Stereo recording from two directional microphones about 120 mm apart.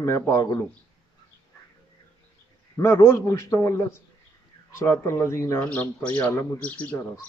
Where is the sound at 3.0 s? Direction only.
25° left (ahead or behind).